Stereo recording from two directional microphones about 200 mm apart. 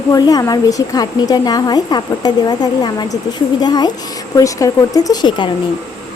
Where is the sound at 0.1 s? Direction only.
20° left (ahead or behind).